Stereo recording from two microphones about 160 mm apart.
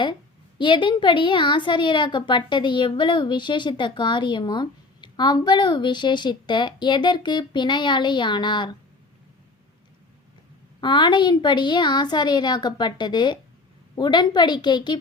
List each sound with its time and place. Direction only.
0.6 s a woman's voice: 30° left (ahead or behind)
10.8 s a woman's voice: 30° left (ahead or behind)